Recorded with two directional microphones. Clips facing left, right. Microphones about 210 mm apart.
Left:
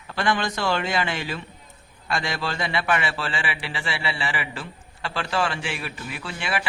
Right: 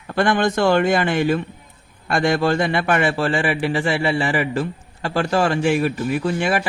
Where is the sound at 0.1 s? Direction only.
50° right (ahead or behind).